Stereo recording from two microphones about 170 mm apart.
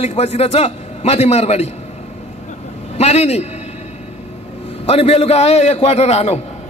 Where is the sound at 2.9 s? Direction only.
40° left (ahead or behind).